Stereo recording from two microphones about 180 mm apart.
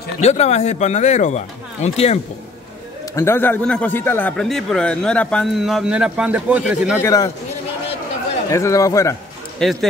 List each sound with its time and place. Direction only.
0.2 s speech: 40° left (ahead or behind)
3.2 s a man's voice: 10° left (ahead or behind); by 7.0 s 5° right (ahead or behind)
7.0 s speech: 15° left (ahead or behind)
8.5 s speech: 15° left (ahead or behind)
9.6 s speech: centre (ahead or behind)